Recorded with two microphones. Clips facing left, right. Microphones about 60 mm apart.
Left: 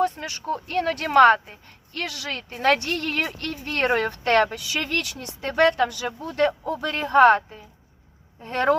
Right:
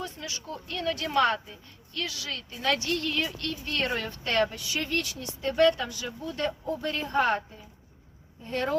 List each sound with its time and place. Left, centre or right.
0.0 s a woman's voice: left